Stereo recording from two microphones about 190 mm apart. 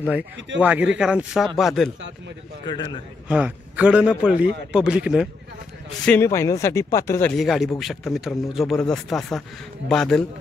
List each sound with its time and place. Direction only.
0.6 s speech: 10° right (ahead or behind)
2.6 s a man's voice: 25° left (ahead or behind)
3.3 s a man's voice: 5° right (ahead or behind)
6.0 s speech: 10° left (ahead or behind)
7.3 s speech: centre (ahead or behind)